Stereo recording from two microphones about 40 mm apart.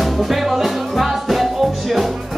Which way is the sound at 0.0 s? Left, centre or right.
Centre.